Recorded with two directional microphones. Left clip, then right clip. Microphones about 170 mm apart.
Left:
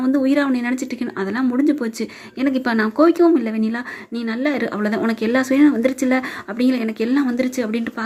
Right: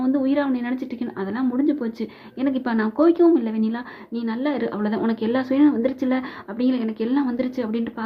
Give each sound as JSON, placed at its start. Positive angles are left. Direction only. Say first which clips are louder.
{"t": 0.0, "sound": "speech", "louder": "left 4 dB", "side_deg": 25}